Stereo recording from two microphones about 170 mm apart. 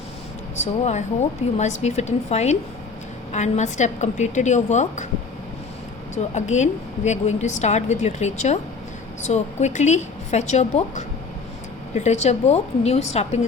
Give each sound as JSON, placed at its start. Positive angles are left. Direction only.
{"t": 0.5, "sound": "a woman's voice", "side_deg": 40}
{"t": 6.3, "sound": "a woman's voice", "side_deg": 45}